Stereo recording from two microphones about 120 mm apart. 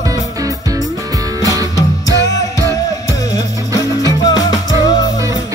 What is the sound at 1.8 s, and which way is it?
Music, 30° left (ahead or behind).